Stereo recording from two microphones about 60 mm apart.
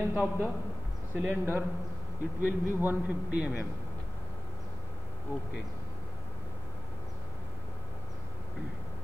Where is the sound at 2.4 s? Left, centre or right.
Right.